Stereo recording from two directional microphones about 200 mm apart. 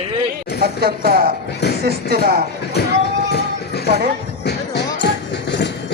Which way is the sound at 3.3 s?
55° left (ahead or behind).